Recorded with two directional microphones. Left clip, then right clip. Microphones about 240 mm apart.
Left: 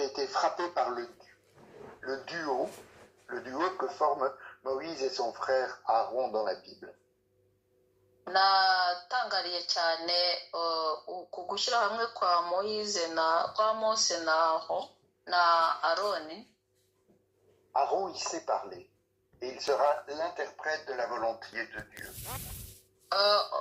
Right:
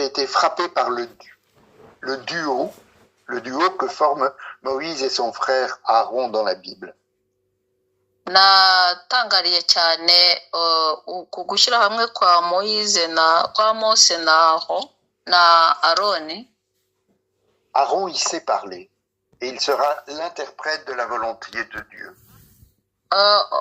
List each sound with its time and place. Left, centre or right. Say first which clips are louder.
0.0 s speech: right 11 dB; right
8.2 s speech: right 12 dB; right
17.7 s speech: right 10 dB; right
23.0 s honk: right 11 dB; right